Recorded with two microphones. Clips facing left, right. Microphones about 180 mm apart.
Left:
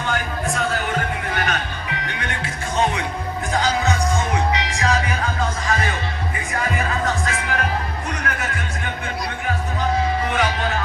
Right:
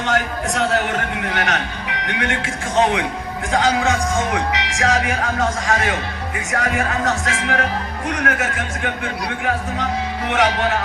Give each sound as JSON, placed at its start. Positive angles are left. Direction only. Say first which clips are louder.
{"t": 0.0, "sound": "music", "louder": "right 3 dB", "side_deg": -75}
{"t": 2.0, "sound": "speech", "louder": "right 5 dB", "side_deg": -75}
{"t": 10.2, "sound": "speech", "louder": "right 4 dB", "side_deg": -75}